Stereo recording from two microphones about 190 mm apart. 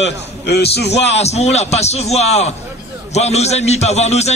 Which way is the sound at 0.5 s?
60° left (ahead or behind).